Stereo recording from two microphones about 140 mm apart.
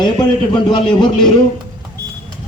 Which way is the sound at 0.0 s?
35° left (ahead or behind).